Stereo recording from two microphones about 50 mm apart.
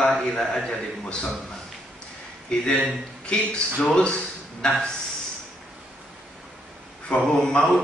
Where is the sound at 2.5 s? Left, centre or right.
Left.